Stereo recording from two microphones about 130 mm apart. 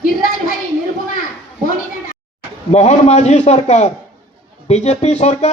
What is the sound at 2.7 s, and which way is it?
Speech, 60° left (ahead or behind).